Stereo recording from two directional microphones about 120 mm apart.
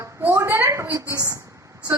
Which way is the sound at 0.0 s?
20° right (ahead or behind).